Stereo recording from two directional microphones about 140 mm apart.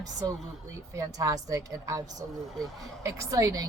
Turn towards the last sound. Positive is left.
turn(degrees=-25)  # may be behind; listen again after turning